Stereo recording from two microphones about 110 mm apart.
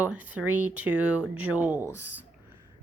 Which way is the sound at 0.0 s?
15° right (ahead or behind).